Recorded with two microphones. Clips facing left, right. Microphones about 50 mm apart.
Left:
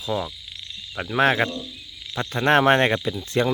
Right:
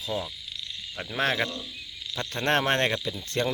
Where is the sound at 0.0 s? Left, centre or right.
Left.